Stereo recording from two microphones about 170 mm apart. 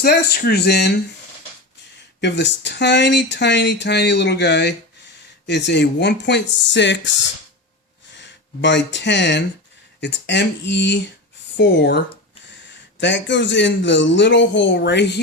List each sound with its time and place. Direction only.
0.0 s speech: 70° left (ahead or behind)
2.2 s speech: 90° left
8.1 s speech: 90° left